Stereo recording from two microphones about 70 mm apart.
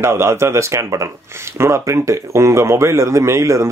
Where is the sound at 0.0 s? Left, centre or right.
Right.